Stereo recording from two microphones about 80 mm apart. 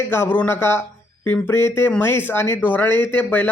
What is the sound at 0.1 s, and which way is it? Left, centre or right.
A man's voice, left.